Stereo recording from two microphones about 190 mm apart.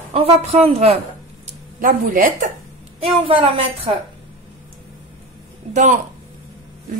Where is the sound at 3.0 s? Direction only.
30° right (ahead or behind).